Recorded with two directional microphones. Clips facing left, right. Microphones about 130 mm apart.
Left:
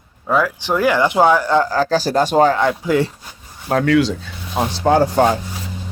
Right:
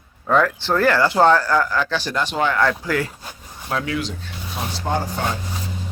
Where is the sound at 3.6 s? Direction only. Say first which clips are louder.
Left 7 dB; 45° left (ahead or behind).